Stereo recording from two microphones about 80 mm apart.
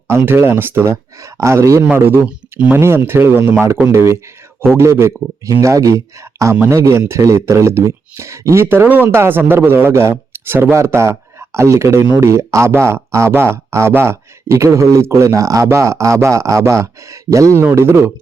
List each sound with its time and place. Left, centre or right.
0.1 s speech: right
2.2 s speech: centre
2.7 s a man's voice: right